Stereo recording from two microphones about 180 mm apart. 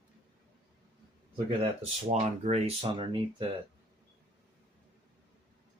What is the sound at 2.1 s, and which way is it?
Speech, 35° right (ahead or behind).